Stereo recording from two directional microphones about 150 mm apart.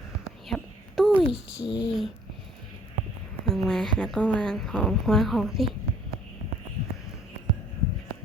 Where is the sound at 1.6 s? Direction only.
30° left (ahead or behind).